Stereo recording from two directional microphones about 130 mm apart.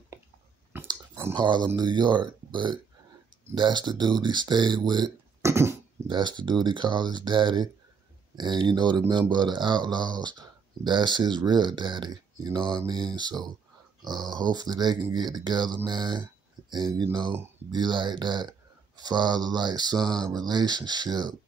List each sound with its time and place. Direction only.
0.8 s a sound: 25° right (ahead or behind)
1.3 s speech: 35° right (ahead or behind)
5.4 s dog: 20° right (ahead or behind)
6.0 s speech: 35° right (ahead or behind)